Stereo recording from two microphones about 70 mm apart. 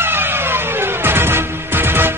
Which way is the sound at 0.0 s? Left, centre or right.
Right.